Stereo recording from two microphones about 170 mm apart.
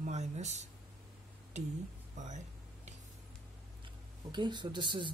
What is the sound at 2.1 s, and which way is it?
Music, 45° right (ahead or behind).